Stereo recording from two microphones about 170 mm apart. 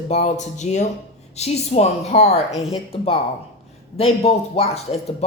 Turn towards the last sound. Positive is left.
turn(degrees=35)  # may be behind; listen again after turning